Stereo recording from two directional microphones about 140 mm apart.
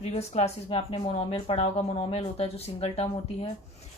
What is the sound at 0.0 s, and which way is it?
Speech, 50° left (ahead or behind).